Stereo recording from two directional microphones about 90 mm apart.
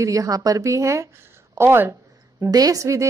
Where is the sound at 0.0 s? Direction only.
40° right (ahead or behind).